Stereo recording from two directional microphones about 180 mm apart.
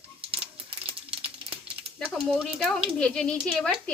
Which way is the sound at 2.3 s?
5° left (ahead or behind).